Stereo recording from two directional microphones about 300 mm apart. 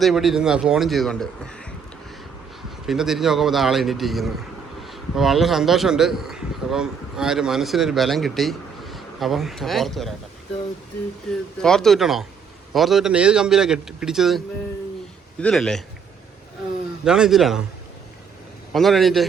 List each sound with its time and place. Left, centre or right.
0.0 s a man's voice: centre
2.8 s a man's voice: centre
11.3 s a man's voice: centre
17.0 s a man's voice: centre
18.7 s a man's voice: centre